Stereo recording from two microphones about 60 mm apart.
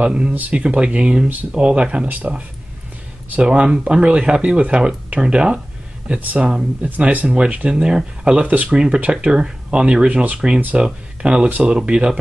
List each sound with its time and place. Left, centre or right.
0.0 s speech: centre
3.4 s speech: centre